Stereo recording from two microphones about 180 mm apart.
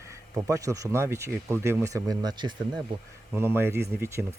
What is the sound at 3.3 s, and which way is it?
Speech, 10° right (ahead or behind).